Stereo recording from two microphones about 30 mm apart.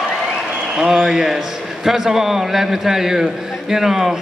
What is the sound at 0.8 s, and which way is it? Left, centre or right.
A man's voice, centre.